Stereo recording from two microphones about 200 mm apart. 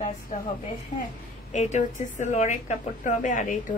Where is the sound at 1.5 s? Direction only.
35° left (ahead or behind).